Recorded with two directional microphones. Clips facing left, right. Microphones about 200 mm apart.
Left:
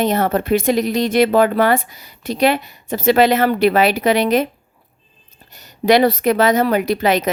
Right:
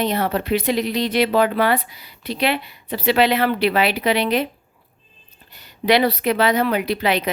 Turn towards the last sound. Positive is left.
turn(degrees=45)  # may be behind; listen again after turning